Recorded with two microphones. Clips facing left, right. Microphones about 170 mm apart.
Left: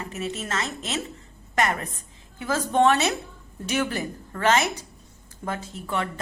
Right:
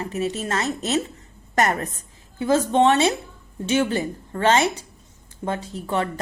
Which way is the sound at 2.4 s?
30° right (ahead or behind).